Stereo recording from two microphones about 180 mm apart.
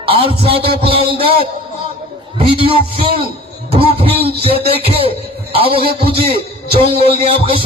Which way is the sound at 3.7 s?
30° right (ahead or behind).